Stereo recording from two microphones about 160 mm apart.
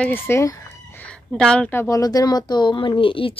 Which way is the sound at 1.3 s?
5° left (ahead or behind).